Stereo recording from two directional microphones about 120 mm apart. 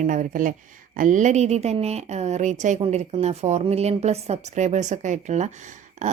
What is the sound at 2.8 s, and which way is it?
A woman's voice, 60° right (ahead or behind).